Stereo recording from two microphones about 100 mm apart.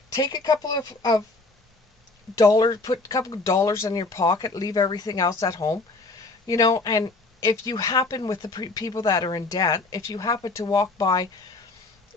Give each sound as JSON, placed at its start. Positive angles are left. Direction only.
{"t": 0.1, "sound": "speech", "side_deg": 40}
{"t": 2.4, "sound": "speech", "side_deg": 40}